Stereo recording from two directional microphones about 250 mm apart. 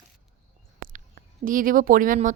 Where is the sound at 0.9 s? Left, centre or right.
Right.